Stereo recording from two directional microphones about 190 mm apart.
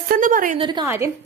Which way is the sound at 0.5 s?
25° right (ahead or behind).